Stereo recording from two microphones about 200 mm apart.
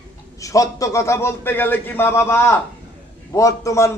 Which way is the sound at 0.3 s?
15° left (ahead or behind).